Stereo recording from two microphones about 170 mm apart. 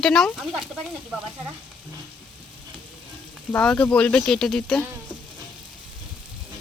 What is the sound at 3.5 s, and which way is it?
Speech, 5° left (ahead or behind).